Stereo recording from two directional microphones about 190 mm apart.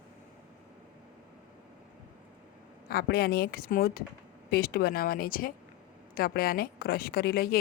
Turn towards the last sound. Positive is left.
turn(degrees=55)  # may be behind; listen again after turning